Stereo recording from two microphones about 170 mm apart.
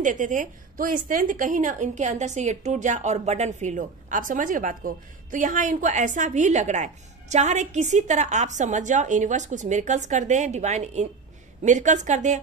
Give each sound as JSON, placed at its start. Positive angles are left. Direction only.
{"t": 0.0, "sound": "a woman's voice", "side_deg": -50}